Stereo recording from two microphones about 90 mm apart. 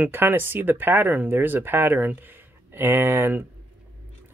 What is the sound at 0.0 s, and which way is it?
Speech, 20° right (ahead or behind).